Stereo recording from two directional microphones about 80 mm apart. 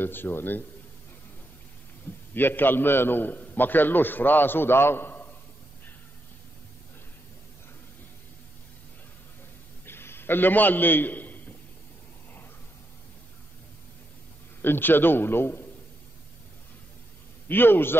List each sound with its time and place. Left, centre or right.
0.0 s a man's voice: left
2.3 s a man's voice: left
9.8 s a sound: left
14.6 s a man's voice: left
17.5 s a man's voice: left